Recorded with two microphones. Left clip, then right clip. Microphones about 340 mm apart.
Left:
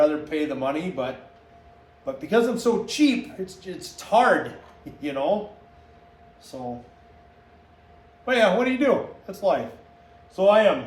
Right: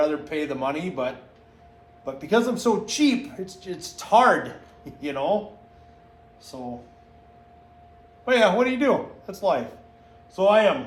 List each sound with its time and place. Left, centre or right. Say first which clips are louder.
0.0 s a man's voice: left 3 dB; centre
6.5 s a man's voice: left 2 dB; centre
8.2 s a man's voice: right 1 dB; centre